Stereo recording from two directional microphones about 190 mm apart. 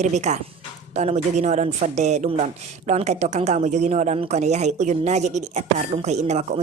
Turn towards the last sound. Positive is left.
turn(degrees=-35)  # may be behind; listen again after turning